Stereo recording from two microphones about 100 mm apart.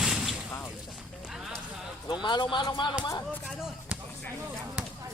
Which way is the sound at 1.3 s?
5° right (ahead or behind).